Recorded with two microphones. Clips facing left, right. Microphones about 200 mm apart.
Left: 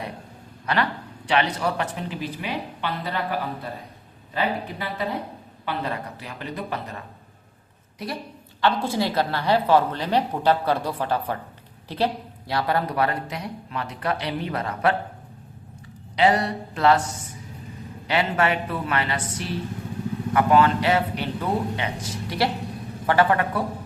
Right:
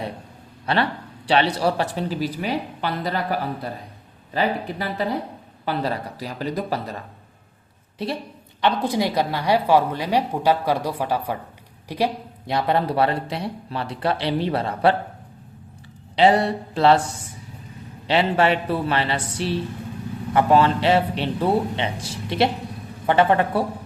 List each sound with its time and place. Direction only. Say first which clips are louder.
0.6 s a woman's voice: right 2 dB; 30° right (ahead or behind)
8.6 s a woman's voice: right 2 dB; 15° right (ahead or behind)
16.1 s speech: right 3 dB; 30° right (ahead or behind)